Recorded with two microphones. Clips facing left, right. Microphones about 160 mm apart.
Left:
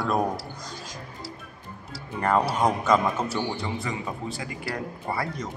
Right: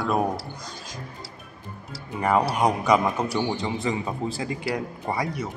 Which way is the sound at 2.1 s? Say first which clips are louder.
Right 1 dB; 10° right (ahead or behind).